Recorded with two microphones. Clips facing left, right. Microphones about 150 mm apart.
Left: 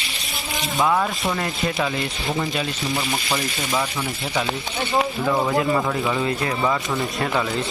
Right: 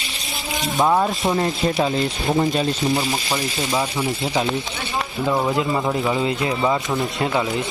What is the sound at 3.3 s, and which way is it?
Speech, 25° right (ahead or behind).